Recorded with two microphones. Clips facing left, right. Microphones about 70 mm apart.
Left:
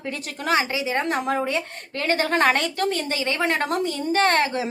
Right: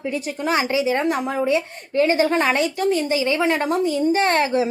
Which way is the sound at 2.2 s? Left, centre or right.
Left.